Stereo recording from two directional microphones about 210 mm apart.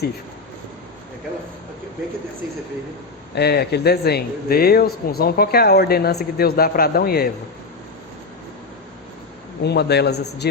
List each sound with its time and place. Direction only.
3.3 s speech: 50° left (ahead or behind)
9.6 s speech: 50° left (ahead or behind)